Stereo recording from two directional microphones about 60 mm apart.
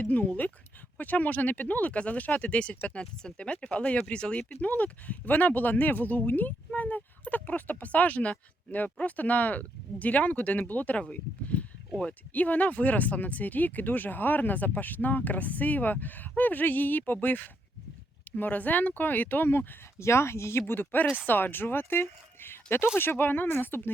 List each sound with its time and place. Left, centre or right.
0.0 s speech: left
20.0 s speech: left